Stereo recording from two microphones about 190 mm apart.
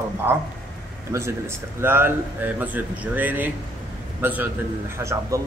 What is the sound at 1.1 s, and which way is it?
A man's voice, 15° right (ahead or behind).